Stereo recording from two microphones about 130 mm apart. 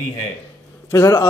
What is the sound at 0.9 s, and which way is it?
Speech, 20° left (ahead or behind).